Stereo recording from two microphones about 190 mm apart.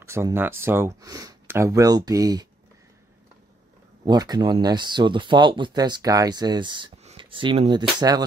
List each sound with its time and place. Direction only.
0.0 s speech: 15° right (ahead or behind)
4.0 s speech: 20° right (ahead or behind)